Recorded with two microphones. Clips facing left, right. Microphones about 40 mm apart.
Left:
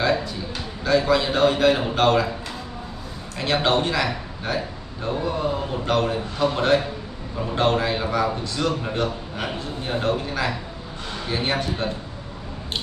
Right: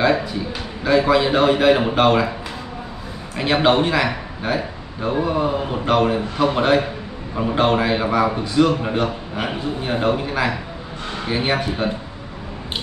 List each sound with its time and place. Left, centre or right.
0.0 s a man's voice: centre
3.3 s a man's voice: centre